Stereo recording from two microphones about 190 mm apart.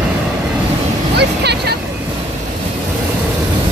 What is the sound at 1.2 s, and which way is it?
Vehicle, 60° right (ahead or behind).